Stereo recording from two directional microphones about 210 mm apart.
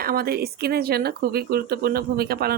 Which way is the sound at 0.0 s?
45° right (ahead or behind).